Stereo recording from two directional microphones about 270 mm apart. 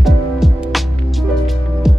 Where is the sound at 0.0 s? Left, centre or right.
Centre.